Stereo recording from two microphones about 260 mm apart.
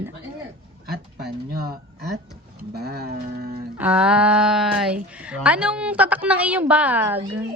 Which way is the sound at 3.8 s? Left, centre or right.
Centre.